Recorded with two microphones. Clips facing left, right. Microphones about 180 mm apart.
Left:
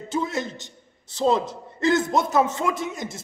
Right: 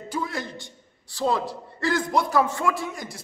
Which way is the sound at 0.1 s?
25° left (ahead or behind).